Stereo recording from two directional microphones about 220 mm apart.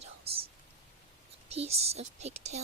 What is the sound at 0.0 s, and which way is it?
Whispering, 25° right (ahead or behind).